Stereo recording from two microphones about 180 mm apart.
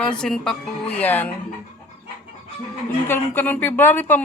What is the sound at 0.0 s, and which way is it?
Speech, 5° left (ahead or behind).